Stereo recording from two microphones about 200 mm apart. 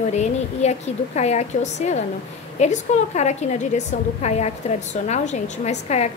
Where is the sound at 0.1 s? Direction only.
35° left (ahead or behind).